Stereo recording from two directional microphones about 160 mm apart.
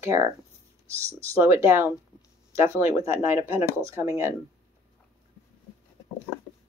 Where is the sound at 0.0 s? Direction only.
20° right (ahead or behind).